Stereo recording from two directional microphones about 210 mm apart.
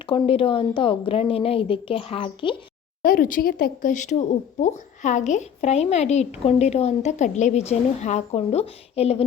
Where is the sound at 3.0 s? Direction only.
45° left (ahead or behind).